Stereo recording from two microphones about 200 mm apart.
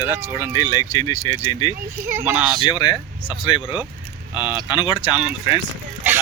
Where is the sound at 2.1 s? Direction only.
10° right (ahead or behind).